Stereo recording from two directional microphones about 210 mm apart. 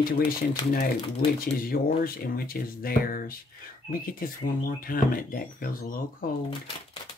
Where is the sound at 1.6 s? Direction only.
45° left (ahead or behind).